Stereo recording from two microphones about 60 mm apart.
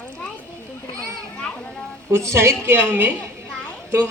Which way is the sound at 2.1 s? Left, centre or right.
Right.